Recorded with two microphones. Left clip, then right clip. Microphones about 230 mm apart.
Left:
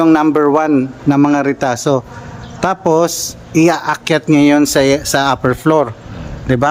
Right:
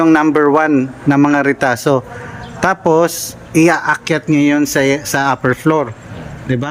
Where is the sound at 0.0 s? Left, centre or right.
Centre.